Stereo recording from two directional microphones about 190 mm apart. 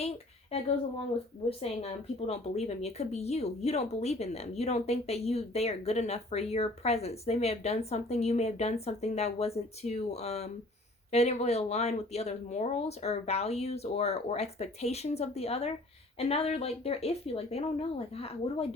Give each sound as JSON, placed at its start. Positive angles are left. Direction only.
{"t": 1.5, "sound": "speech", "side_deg": 30}